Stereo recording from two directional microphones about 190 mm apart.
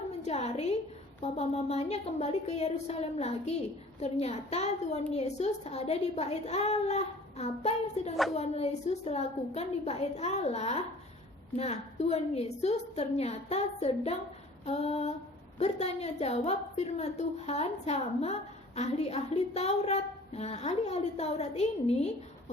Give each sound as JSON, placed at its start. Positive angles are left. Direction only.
{"t": 0.2, "sound": "a woman's voice", "side_deg": 35}